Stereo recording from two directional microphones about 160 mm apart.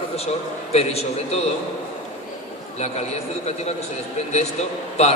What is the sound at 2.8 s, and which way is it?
A man's voice, 40° left (ahead or behind).